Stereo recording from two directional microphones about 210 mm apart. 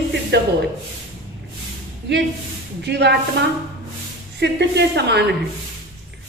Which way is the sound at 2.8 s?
55° right (ahead or behind).